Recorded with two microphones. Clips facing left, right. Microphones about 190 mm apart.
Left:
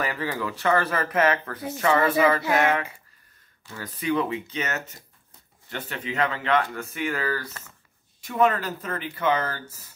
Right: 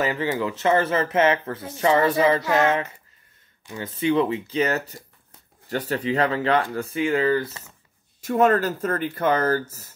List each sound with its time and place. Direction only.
0.0 s speech: 20° right (ahead or behind)
8.2 s speech: 45° right (ahead or behind)